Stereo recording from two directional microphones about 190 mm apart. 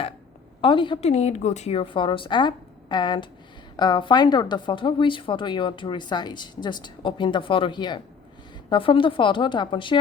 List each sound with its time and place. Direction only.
0.6 s a woman's voice: 25° left (ahead or behind)